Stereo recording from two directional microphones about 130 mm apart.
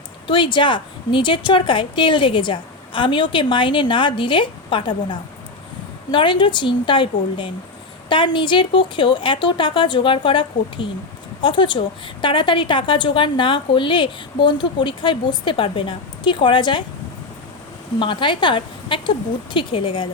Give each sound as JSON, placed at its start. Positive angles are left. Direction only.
{"t": 0.3, "sound": "a woman's voice", "side_deg": 40}
{"t": 18.0, "sound": "a woman's voice", "side_deg": 40}